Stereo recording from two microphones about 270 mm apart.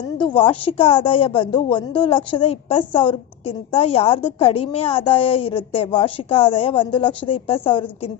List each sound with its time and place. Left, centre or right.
0.2 s a woman's voice: centre